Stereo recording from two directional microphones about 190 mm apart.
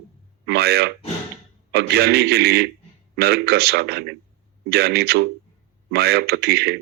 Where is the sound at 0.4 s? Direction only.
60° right (ahead or behind).